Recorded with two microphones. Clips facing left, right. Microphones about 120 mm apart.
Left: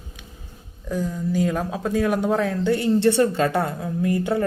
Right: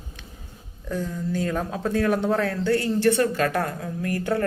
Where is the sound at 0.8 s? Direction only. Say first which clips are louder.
Left 3 dB; 10° left (ahead or behind).